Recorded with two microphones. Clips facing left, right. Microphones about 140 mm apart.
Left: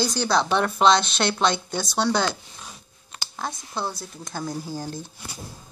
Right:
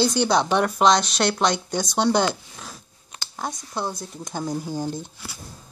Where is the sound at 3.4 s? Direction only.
15° right (ahead or behind).